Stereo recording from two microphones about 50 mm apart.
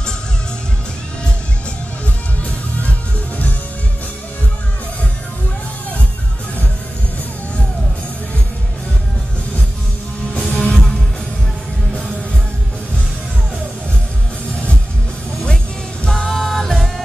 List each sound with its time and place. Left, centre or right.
10.5 s music: centre
15.4 s music: centre
16.1 s music: centre